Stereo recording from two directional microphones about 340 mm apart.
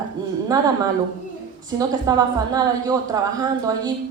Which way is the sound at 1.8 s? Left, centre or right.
Centre.